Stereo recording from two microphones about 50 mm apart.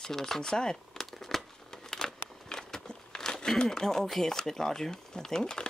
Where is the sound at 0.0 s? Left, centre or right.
Centre.